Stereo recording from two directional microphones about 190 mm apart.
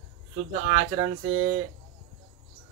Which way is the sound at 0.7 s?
45° right (ahead or behind).